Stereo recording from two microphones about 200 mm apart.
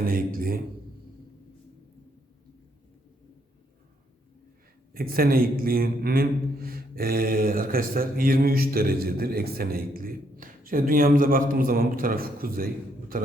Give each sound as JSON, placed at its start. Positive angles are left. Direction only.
{"t": 0.0, "sound": "a man's voice", "side_deg": -45}
{"t": 4.9, "sound": "a man's voice", "side_deg": -45}